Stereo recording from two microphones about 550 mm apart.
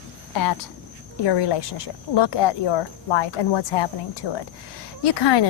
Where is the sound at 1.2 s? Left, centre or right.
Left.